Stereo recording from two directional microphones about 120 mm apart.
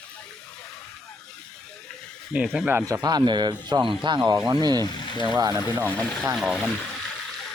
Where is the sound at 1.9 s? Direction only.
5° left (ahead or behind).